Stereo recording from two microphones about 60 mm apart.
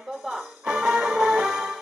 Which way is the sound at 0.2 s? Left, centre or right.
Centre.